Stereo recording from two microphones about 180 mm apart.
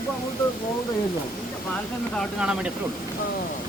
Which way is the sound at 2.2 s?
5° right (ahead or behind).